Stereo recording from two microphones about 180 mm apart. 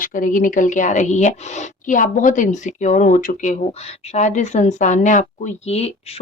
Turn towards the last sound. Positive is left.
turn(degrees=35)  # may be behind; listen again after turning